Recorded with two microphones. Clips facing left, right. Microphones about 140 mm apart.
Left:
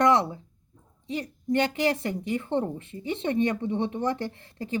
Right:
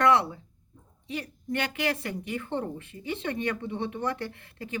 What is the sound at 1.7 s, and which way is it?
Speech, 25° left (ahead or behind).